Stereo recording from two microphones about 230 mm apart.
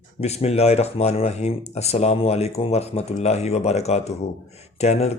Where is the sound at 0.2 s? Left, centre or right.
Left.